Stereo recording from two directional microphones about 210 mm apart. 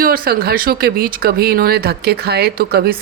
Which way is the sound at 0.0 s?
45° right (ahead or behind).